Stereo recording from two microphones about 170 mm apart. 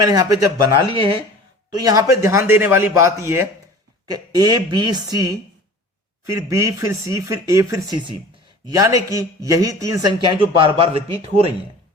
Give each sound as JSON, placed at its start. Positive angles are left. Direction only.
{"t": 0.1, "sound": "a man's voice", "side_deg": -20}
{"t": 1.7, "sound": "a man's voice", "side_deg": -20}
{"t": 6.2, "sound": "a man's voice", "side_deg": -20}